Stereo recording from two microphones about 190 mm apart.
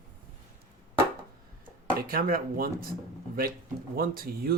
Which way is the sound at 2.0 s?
50° right (ahead or behind).